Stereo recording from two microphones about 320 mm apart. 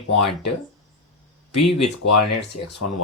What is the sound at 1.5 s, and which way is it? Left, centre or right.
Speech, left.